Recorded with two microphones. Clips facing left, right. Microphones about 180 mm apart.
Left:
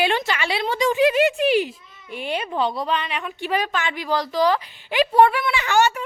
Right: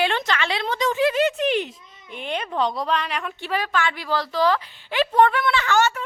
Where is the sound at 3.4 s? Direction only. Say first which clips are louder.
Left 1 dB; 15° left (ahead or behind).